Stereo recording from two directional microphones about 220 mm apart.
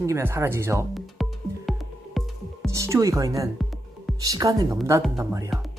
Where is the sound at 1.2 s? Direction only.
Centre (ahead or behind).